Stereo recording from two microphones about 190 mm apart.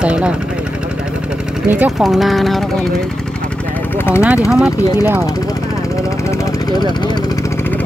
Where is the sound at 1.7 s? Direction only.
5° right (ahead or behind).